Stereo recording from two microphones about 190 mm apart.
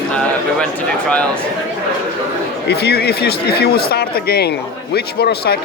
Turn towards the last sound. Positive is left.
turn(degrees=55)  # may be behind; listen again after turning